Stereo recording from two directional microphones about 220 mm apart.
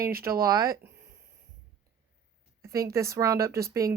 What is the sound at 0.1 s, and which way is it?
Speech, 40° right (ahead or behind).